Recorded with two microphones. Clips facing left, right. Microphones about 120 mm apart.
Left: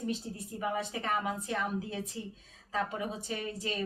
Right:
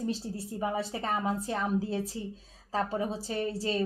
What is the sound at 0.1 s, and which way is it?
Speech, 30° right (ahead or behind).